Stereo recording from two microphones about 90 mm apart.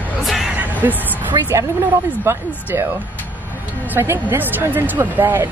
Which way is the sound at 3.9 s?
25° right (ahead or behind).